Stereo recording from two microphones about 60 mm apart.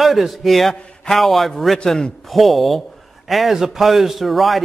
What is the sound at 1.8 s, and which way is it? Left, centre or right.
A man's voice, centre.